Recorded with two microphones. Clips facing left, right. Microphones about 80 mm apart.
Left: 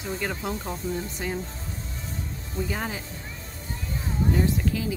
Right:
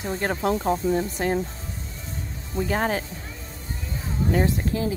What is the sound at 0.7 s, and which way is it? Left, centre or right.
Speech, right.